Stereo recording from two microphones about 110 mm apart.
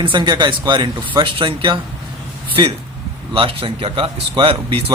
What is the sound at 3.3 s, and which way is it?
Speech, 55° right (ahead or behind).